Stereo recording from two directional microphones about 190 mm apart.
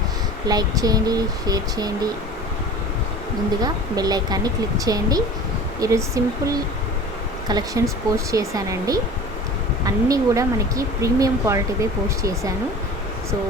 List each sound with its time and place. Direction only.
0.4 s speech: 20° right (ahead or behind)
3.6 s speech: 20° right (ahead or behind)